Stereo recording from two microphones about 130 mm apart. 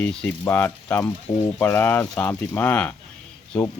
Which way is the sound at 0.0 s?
10° left (ahead or behind).